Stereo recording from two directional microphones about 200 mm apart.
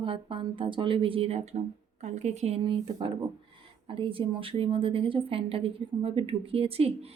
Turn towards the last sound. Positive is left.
turn(degrees=-30)  # may be behind; listen again after turning